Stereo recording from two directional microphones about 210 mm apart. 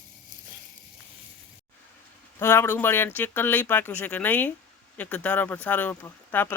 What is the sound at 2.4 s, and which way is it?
Speech, 10° left (ahead or behind).